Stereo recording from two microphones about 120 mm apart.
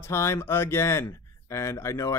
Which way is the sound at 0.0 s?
20° left (ahead or behind).